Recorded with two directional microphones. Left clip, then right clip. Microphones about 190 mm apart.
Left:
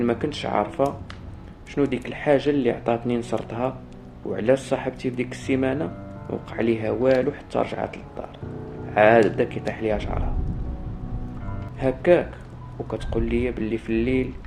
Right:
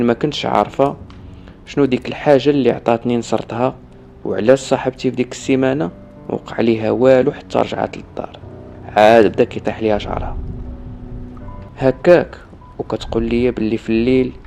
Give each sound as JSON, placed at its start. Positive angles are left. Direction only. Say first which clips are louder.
{"t": 0.0, "sound": "speech", "louder": "right 8 dB", "side_deg": -50}
{"t": 11.8, "sound": "speech", "louder": "right 8 dB", "side_deg": -55}